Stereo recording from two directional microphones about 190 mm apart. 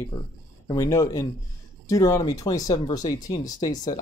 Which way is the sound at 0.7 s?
15° left (ahead or behind).